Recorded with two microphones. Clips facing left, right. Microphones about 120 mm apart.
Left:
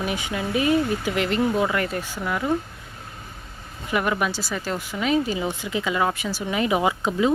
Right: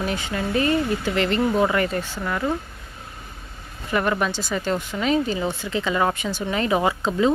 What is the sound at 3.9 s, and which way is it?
Speech, 10° left (ahead or behind).